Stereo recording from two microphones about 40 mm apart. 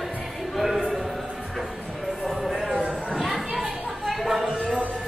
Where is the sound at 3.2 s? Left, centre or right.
Centre.